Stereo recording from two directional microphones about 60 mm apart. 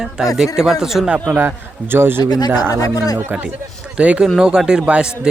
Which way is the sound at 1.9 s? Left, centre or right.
Right.